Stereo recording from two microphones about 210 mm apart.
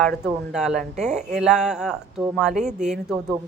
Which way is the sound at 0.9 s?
35° right (ahead or behind).